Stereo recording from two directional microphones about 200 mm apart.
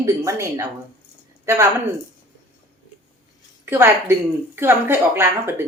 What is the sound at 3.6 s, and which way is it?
Speech, 10° right (ahead or behind).